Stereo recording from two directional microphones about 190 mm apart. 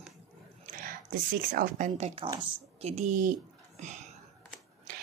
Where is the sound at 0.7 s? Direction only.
45° right (ahead or behind).